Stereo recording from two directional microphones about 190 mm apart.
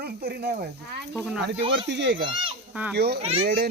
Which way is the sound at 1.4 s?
65° right (ahead or behind).